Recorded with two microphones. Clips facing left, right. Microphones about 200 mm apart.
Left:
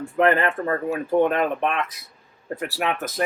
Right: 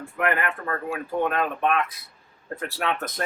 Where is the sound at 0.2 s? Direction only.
30° left (ahead or behind).